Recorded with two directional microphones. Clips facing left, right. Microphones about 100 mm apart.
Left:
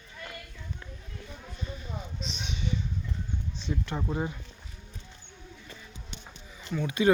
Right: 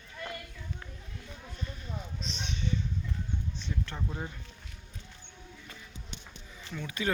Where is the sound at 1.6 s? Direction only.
5° left (ahead or behind).